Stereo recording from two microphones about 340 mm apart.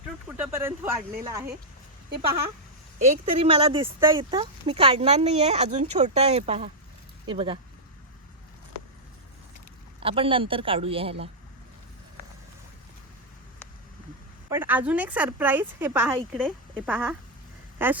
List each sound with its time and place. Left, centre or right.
0.3 s speech: centre
3.0 s speech: centre
10.0 s speech: centre
14.5 s speech: centre